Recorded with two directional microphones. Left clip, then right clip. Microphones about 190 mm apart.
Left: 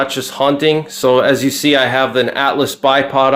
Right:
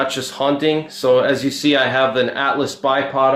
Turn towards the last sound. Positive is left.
turn(degrees=45)  # may be behind; listen again after turning